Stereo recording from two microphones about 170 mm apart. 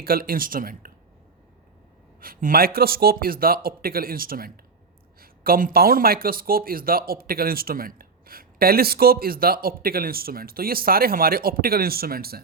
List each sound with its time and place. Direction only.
0.0 s speech: 60° right (ahead or behind)
2.2 s speech: 60° right (ahead or behind)